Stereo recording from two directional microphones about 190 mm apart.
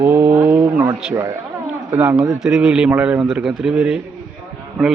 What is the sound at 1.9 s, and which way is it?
A man's voice, 10° right (ahead or behind).